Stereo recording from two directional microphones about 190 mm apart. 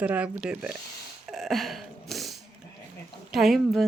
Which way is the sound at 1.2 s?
Centre (ahead or behind).